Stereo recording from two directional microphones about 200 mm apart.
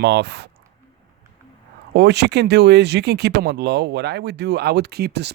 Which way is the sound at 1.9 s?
60° right (ahead or behind).